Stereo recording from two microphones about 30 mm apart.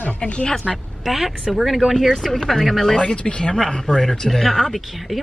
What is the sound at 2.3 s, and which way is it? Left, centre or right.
Speech, centre.